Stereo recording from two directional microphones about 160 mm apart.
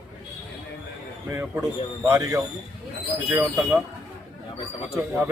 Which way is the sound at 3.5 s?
Centre (ahead or behind).